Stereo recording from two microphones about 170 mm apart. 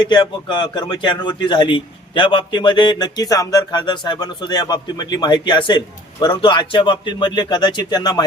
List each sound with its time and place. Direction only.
0.0 s a man's voice: 25° left (ahead or behind)